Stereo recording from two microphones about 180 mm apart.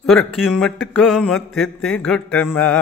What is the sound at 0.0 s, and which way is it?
Speech, centre (ahead or behind).